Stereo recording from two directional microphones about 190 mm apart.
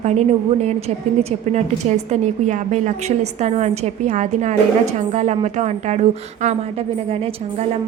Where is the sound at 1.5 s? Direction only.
35° right (ahead or behind).